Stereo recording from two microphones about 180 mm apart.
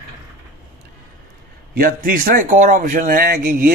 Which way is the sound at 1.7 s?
55° right (ahead or behind).